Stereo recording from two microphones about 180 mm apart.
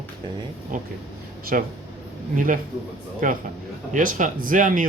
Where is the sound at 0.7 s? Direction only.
50° right (ahead or behind).